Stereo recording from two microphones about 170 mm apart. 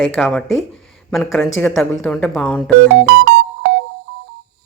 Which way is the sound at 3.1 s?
70° right (ahead or behind).